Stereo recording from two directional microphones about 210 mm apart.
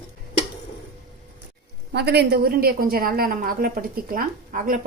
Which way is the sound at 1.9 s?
50° right (ahead or behind).